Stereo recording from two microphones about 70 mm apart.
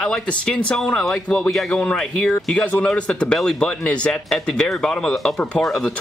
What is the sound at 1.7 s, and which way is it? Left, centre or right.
Speech, centre.